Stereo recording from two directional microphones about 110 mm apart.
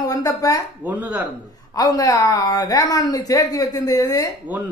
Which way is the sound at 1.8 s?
30° left (ahead or behind).